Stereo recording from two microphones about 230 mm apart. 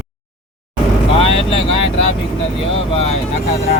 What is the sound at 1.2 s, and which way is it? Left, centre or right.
Speech, left.